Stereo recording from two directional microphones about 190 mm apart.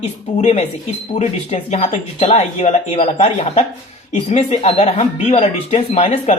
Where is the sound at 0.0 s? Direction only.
35° left (ahead or behind).